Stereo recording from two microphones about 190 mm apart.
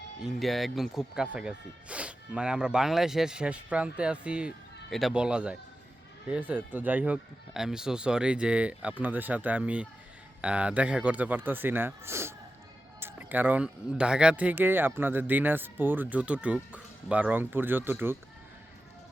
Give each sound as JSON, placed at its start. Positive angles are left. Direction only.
{"t": 0.2, "sound": "speech", "side_deg": 0}